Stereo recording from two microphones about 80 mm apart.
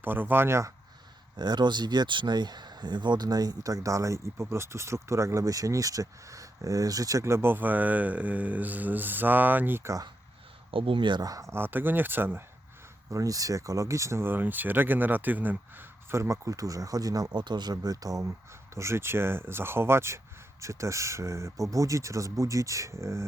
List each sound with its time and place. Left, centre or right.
0.0 s speech: right
1.4 s speech: right
10.7 s speech: right
11.2 s speech: right
11.5 s speech: right
13.1 s speech: right
17.3 s speech: right
18.7 s speech: right